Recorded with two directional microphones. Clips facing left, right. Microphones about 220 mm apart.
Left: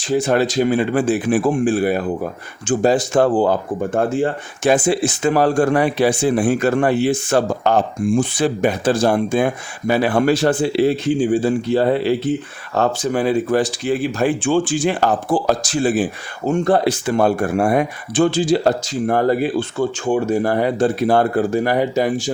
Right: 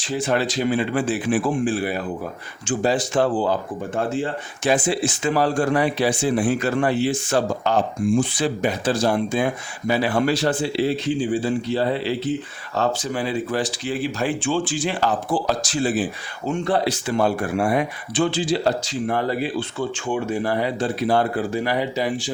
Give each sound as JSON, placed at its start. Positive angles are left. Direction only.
{"t": 0.0, "sound": "speech", "side_deg": 45}